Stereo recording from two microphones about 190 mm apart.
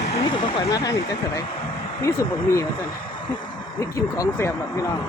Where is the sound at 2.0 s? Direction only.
15° left (ahead or behind).